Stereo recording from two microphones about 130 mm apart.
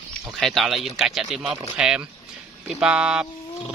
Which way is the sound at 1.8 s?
5° right (ahead or behind).